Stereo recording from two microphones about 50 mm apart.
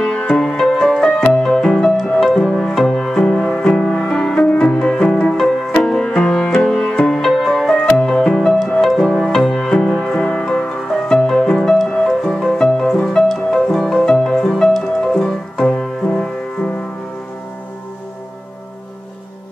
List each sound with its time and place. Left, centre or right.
0.0 s music: centre
0.4 s music: centre
9.8 s music: centre
10.1 s music: centre
14.0 s music: centre
15.0 s piano: centre
16.1 s music: centre